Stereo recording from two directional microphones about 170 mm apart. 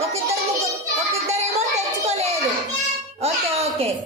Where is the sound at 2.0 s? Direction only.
40° right (ahead or behind).